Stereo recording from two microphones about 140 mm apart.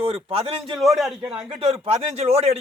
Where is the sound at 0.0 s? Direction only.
45° right (ahead or behind).